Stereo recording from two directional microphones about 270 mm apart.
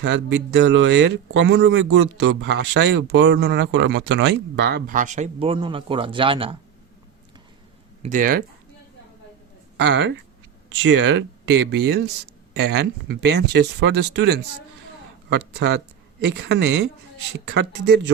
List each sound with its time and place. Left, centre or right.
0.0 s speech: right; by 6.6 s centre
8.0 s speech: right
9.8 s speech: right